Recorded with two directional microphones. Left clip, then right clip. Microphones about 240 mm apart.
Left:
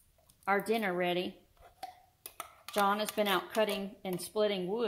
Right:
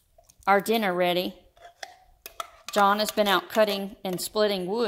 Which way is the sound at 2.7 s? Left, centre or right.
Right.